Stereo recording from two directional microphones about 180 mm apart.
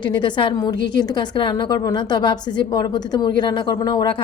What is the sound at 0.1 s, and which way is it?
A woman's voice, 25° left (ahead or behind).